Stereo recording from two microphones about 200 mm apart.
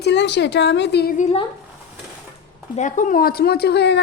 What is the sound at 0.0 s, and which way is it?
A woman's voice, 60° left (ahead or behind).